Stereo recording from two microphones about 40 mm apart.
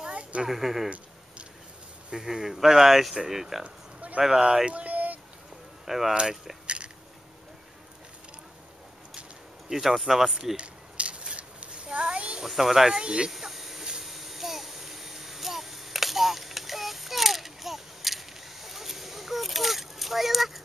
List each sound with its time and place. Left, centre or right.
0.1 s a sound: right
0.5 s speech: centre
2.0 s speech: centre
3.6 s a sound: right
4.2 s speech: centre
4.6 s a sound: right
5.9 s speech: centre
9.7 s speech: centre
10.5 s scissors: right
12.4 s speech: centre
13.0 s speech: centre
13.3 s a sound: centre